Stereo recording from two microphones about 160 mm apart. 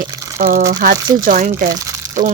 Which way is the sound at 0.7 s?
60° right (ahead or behind).